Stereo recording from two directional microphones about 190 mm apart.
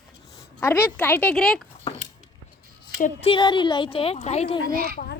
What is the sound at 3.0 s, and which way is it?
Speech, 30° left (ahead or behind).